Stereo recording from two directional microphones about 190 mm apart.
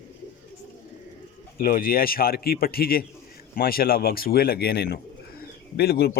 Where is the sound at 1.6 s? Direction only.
50° left (ahead or behind).